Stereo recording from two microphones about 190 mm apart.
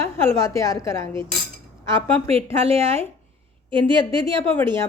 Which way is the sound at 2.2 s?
30° right (ahead or behind).